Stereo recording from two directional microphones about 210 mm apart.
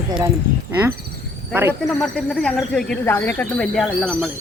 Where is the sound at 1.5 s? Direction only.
10° right (ahead or behind).